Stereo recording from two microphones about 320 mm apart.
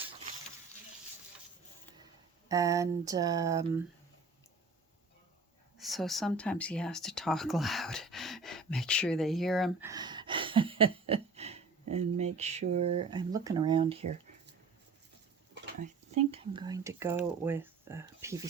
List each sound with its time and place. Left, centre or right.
2.5 s speech: centre
5.7 s speech: centre
9.9 s a sound: centre
15.8 s speech: centre